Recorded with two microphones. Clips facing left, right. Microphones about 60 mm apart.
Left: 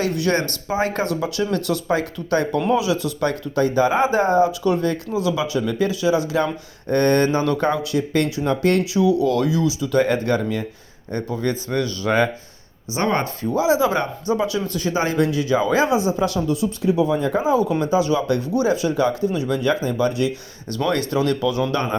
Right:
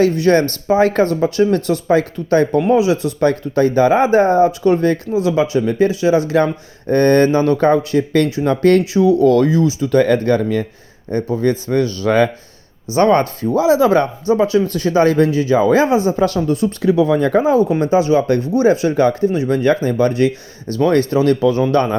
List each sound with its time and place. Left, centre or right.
0.0 s speech: right
8.8 s speech: right
11.1 s speech: right
16.8 s speech: right
17.6 s speech: right